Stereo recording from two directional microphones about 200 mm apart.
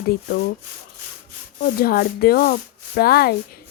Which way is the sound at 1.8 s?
50° left (ahead or behind).